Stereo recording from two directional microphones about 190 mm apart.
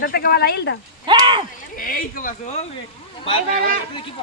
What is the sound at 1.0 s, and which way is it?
Speech, 25° right (ahead or behind).